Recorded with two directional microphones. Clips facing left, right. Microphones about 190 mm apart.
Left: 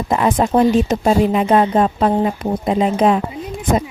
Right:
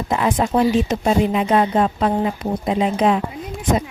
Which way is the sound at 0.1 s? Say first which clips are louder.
Left 3 dB; 45° left (ahead or behind).